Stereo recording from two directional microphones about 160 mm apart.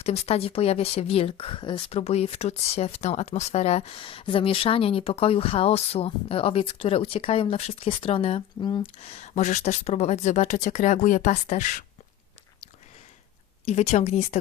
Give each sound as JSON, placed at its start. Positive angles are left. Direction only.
{"t": 0.0, "sound": "speech", "side_deg": 40}
{"t": 13.7, "sound": "a woman's voice", "side_deg": 45}